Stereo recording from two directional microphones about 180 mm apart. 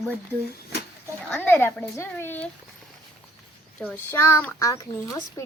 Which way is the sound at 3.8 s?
10° left (ahead or behind).